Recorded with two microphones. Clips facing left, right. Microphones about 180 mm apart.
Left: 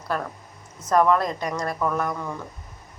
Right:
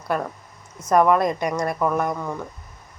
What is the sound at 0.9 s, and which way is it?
A woman's voice, 15° right (ahead or behind).